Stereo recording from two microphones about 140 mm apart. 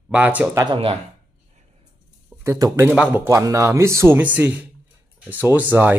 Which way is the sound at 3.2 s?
20° right (ahead or behind).